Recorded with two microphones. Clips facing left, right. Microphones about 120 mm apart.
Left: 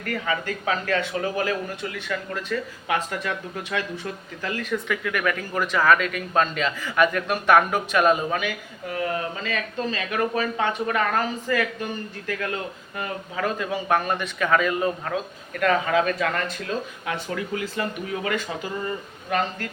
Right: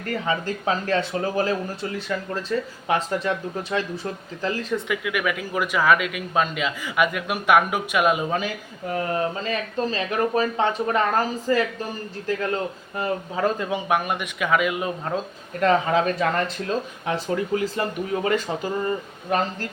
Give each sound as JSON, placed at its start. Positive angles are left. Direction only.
{"t": 0.0, "sound": "speech", "side_deg": -30}
{"t": 4.9, "sound": "speech", "side_deg": -10}
{"t": 8.9, "sound": "speech", "side_deg": -35}
{"t": 13.0, "sound": "speech", "side_deg": -30}
{"t": 15.6, "sound": "speech", "side_deg": -30}